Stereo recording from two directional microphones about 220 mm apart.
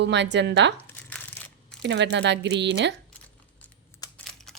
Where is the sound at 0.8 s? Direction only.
10° left (ahead or behind).